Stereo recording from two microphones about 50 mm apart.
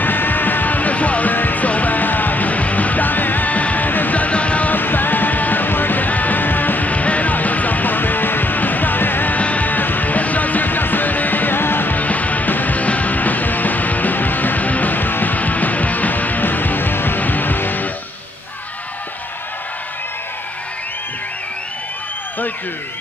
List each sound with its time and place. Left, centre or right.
0.0 s music: left
4.7 s music: left
9.4 s music: left